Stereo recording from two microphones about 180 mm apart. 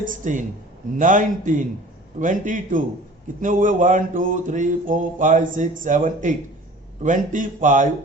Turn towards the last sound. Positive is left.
turn(degrees=-45)  # may be behind; listen again after turning